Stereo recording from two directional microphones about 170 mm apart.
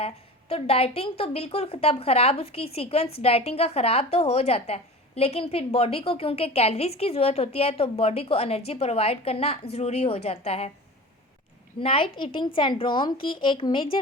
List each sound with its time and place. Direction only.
0.0 s a woman's voice: 35° left (ahead or behind)
11.8 s a woman's voice: 35° left (ahead or behind)